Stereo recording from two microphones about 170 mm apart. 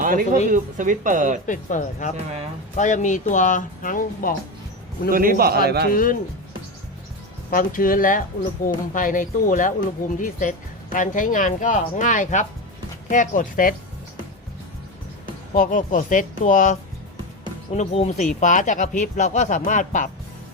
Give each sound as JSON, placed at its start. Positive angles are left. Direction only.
{"t": 0.0, "sound": "speech", "side_deg": -50}
{"t": 1.5, "sound": "speech", "side_deg": 45}
{"t": 5.1, "sound": "a man's voice", "side_deg": -55}
{"t": 5.9, "sound": "speech", "side_deg": 55}
{"t": 7.5, "sound": "speech", "side_deg": 55}
{"t": 15.5, "sound": "speech", "side_deg": 50}
{"t": 17.7, "sound": "speech", "side_deg": 40}